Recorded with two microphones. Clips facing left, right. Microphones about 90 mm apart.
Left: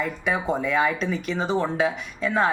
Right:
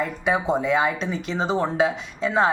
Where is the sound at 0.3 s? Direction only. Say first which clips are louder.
Right 4 dB; 25° right (ahead or behind).